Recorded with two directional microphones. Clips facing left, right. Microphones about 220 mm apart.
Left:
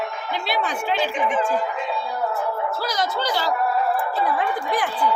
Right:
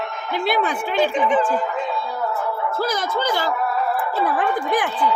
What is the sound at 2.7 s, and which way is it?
Speech, 50° right (ahead or behind).